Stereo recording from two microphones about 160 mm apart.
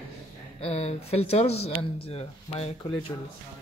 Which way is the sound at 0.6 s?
40° left (ahead or behind).